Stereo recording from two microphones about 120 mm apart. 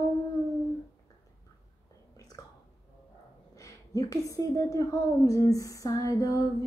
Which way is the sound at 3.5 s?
25° left (ahead or behind).